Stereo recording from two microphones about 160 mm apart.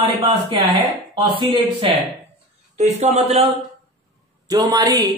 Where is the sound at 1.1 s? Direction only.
30° right (ahead or behind).